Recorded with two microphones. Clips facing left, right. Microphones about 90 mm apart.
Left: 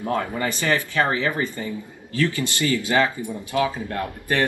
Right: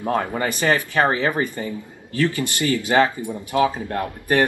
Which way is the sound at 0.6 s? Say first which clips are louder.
Right 3 dB; 20° right (ahead or behind).